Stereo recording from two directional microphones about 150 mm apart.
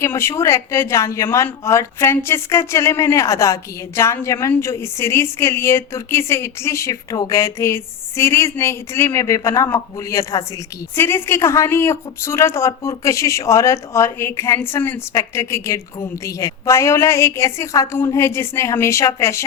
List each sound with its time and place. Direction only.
0.0 s a woman's voice: 20° left (ahead or behind)